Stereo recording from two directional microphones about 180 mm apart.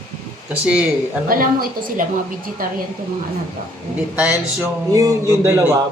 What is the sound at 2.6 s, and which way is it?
Speech, 50° right (ahead or behind).